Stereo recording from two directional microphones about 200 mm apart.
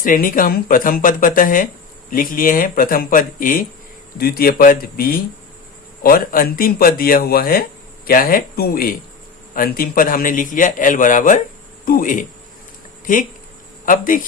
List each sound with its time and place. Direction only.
0.0 s a man's voice: 45° left (ahead or behind)